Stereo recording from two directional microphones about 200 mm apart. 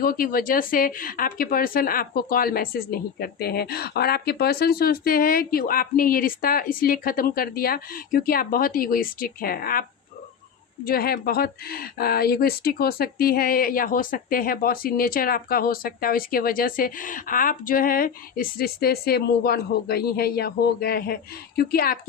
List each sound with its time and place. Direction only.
0.0 s speech: 45° left (ahead or behind)
10.8 s speech: 50° left (ahead or behind)